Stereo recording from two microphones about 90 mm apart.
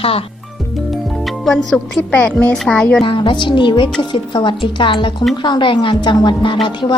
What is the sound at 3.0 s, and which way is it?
A woman's voice, 65° left (ahead or behind).